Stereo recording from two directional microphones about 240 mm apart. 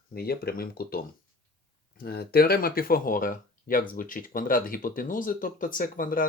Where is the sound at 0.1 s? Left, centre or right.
Left.